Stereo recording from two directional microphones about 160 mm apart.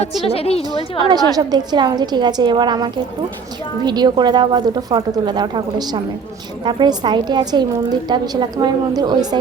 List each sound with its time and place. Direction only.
0.3 s a woman's voice: 40° left (ahead or behind)
1.1 s a woman's voice: 25° right (ahead or behind)